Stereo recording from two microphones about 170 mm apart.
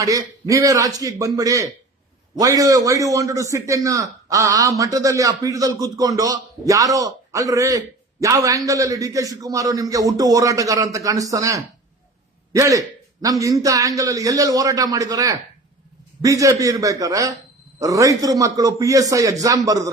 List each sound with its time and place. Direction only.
0.0 s a man's voice: 20° right (ahead or behind)